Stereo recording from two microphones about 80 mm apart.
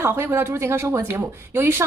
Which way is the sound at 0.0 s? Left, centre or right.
Right.